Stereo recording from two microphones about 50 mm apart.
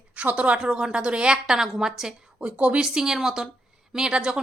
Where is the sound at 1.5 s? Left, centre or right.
Centre.